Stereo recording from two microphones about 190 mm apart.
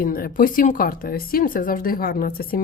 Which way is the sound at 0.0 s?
50° left (ahead or behind).